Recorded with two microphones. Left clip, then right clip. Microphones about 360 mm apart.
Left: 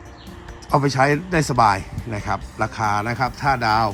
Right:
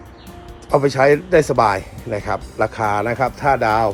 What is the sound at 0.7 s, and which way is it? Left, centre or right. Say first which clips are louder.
Speech: right 4 dB; centre.